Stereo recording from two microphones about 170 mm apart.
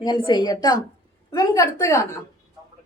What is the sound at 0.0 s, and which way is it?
A woman's voice, 25° left (ahead or behind).